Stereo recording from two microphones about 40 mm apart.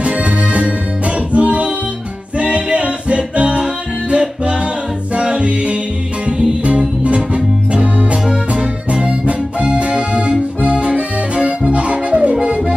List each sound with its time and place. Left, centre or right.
0.0 s music: right
7.8 s music: right
8.3 s music: centre
10.6 s accordion: right
11.7 s music: right